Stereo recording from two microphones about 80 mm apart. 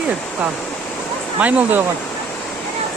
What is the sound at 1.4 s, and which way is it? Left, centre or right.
Speech, centre.